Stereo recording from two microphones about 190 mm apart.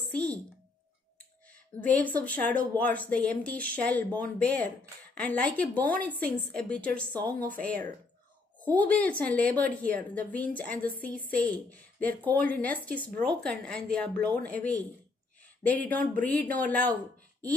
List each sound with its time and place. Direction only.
0.1 s a sound: 5° left (ahead or behind)
1.8 s speech: 10° left (ahead or behind)
16.0 s speech: 50° right (ahead or behind)
16.3 s speech: 10° left (ahead or behind)